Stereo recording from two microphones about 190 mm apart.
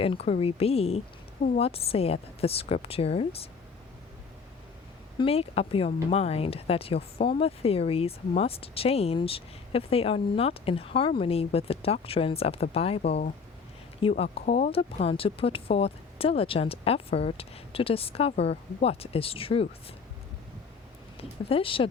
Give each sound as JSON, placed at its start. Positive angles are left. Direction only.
{"t": 0.0, "sound": "speech", "side_deg": 30}
{"t": 5.2, "sound": "speech", "side_deg": 30}
{"t": 21.2, "sound": "speech", "side_deg": 30}